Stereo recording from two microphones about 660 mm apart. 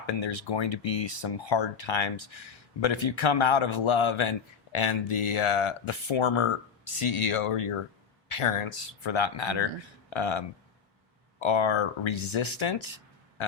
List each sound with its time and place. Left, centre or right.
0.2 s a man's voice: left